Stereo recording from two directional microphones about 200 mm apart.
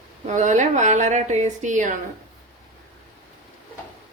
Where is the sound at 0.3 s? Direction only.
35° right (ahead or behind).